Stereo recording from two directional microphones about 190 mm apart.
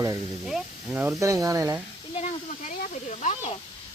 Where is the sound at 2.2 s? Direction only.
40° left (ahead or behind).